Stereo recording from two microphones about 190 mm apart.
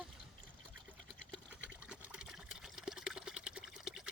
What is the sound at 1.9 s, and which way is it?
Water, 5° right (ahead or behind).